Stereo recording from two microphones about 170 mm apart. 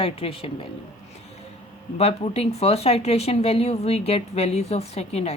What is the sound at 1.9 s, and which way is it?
Speech, 35° left (ahead or behind).